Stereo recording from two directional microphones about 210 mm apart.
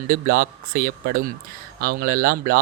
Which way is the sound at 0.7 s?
45° right (ahead or behind).